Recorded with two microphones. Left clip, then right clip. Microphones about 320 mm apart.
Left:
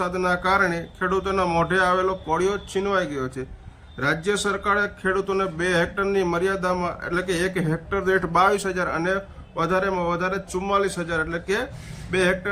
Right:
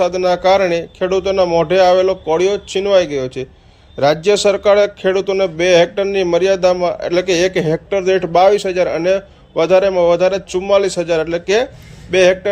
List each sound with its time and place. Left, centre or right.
0.0 s speech: centre
0.6 s a man's voice: right
1.1 s speech: centre
4.0 s a man's voice: right
4.8 s speech: centre